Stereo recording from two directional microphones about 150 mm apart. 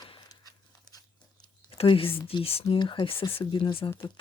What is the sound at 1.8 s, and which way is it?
Speech, 35° left (ahead or behind).